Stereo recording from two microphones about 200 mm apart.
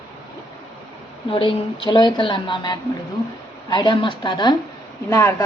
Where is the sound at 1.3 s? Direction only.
25° left (ahead or behind).